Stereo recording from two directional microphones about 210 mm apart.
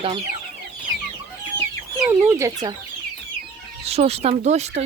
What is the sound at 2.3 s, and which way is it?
Speech, 15° right (ahead or behind).